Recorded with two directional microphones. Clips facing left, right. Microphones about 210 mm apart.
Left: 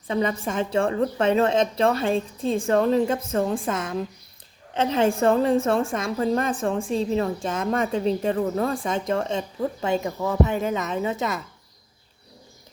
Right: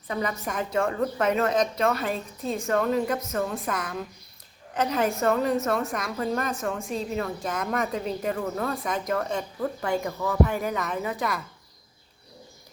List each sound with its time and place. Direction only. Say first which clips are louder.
0.1 s a woman's voice: left 5 dB; 25° left (ahead or behind)